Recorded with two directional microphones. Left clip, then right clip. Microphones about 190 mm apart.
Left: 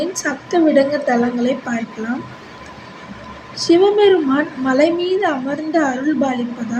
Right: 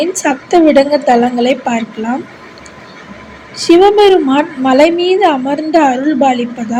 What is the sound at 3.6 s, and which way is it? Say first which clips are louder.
A woman's voice: right 6 dB; 20° right (ahead or behind).